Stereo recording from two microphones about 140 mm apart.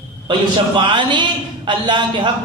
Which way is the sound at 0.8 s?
35° right (ahead or behind).